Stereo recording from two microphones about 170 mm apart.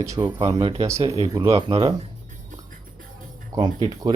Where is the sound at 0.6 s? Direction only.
30° right (ahead or behind).